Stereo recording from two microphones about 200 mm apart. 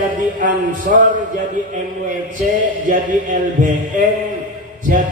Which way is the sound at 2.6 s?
40° right (ahead or behind).